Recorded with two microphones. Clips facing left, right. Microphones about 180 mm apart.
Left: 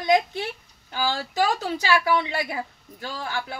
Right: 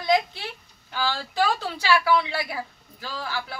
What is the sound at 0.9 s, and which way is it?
A woman's voice, 15° left (ahead or behind).